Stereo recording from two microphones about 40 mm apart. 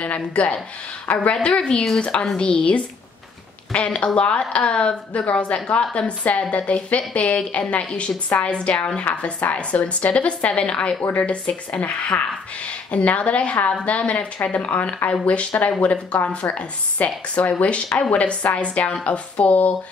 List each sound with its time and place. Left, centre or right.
0.0 s speech: left; by 1.9 s centre
2.0 s a woman's voice: left